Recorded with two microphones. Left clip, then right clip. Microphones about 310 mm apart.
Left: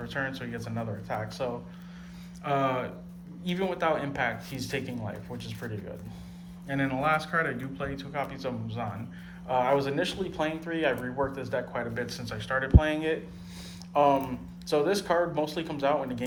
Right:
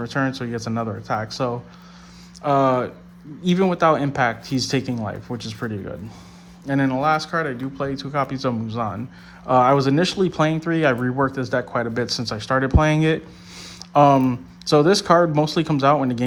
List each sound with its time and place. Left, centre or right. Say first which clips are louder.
0.0 s speech: right 9 dB; centre
6.7 s speech: right 8 dB; centre